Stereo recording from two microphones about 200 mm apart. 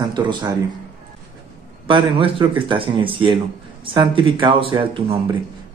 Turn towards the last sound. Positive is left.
turn(degrees=-25)  # may be behind; listen again after turning